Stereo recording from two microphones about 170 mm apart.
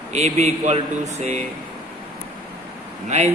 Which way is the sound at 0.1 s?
40° right (ahead or behind).